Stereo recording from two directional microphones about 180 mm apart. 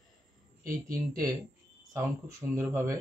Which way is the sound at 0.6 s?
50° right (ahead or behind).